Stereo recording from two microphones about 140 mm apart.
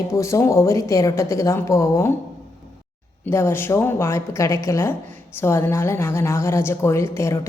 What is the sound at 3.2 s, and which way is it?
A woman's voice, 15° left (ahead or behind).